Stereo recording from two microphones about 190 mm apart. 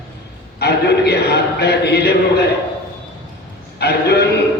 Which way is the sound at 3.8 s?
55° left (ahead or behind).